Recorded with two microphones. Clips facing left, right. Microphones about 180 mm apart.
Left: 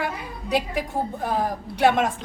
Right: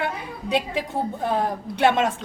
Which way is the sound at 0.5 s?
25° right (ahead or behind).